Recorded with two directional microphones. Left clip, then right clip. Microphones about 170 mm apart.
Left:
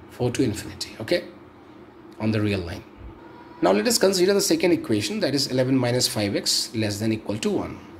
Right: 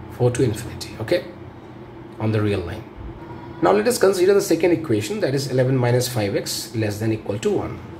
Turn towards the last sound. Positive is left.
turn(degrees=35)  # may be behind; listen again after turning